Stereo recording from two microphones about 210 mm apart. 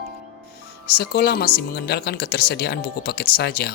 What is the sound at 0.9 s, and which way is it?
Speech, 50° left (ahead or behind).